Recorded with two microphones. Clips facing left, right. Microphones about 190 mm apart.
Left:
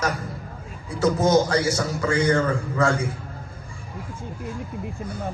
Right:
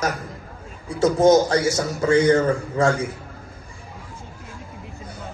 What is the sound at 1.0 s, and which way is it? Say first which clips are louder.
A man's voice: right 4 dB; 30° right (ahead or behind).